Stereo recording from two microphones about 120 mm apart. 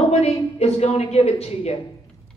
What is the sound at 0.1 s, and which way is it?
A woman's voice, 60° left (ahead or behind).